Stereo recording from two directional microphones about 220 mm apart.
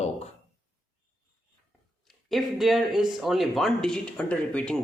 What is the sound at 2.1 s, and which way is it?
Speech, centre (ahead or behind).